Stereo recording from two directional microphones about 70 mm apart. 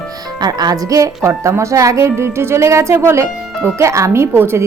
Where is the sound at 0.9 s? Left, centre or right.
Right.